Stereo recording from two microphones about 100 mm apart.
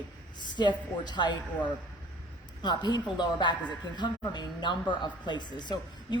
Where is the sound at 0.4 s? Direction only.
50° left (ahead or behind).